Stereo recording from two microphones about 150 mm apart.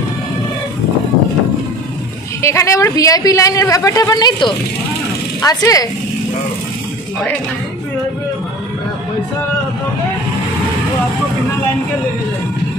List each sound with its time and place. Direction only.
2.4 s speech: 20° left (ahead or behind)